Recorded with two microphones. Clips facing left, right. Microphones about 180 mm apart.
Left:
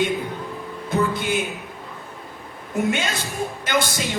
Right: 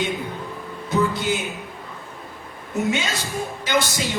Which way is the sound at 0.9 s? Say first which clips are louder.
Right 1 dB; 55° left (ahead or behind).